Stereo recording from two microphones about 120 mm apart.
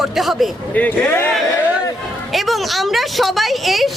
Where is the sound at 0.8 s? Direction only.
15° left (ahead or behind).